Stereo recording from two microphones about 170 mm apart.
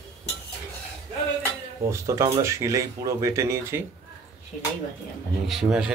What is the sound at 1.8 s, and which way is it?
Speech, 20° right (ahead or behind).